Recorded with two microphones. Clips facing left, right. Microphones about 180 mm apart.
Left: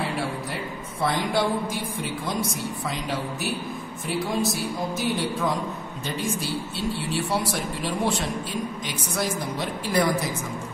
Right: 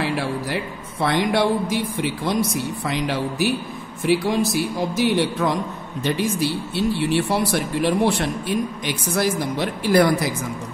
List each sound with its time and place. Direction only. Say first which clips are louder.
1.0 s speech: right 5 dB; 75° right (ahead or behind)